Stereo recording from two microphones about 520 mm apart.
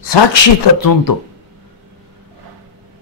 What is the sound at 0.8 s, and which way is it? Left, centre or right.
Speech, left.